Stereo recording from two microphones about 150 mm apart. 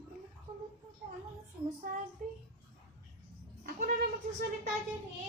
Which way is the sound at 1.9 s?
75° right (ahead or behind).